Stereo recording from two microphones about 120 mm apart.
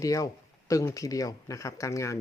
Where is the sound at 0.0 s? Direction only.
30° left (ahead or behind).